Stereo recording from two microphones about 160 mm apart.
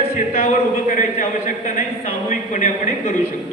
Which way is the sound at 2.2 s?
50° left (ahead or behind).